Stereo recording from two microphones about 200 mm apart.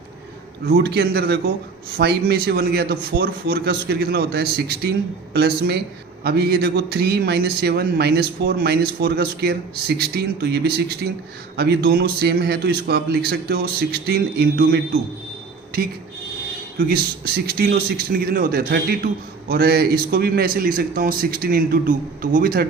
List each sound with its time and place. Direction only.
0.8 s a man's voice: 55° right (ahead or behind)
16.7 s a man's voice: 50° right (ahead or behind)